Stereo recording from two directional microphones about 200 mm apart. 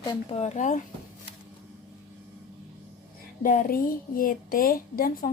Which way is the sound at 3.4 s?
45° left (ahead or behind).